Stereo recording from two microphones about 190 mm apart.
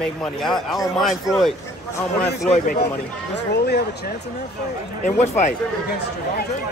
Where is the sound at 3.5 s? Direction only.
60° left (ahead or behind).